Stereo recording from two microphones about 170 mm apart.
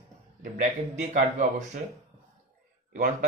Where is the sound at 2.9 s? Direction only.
55° right (ahead or behind).